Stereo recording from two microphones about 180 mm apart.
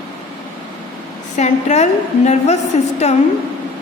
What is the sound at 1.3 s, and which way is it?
A woman's voice, 40° left (ahead or behind).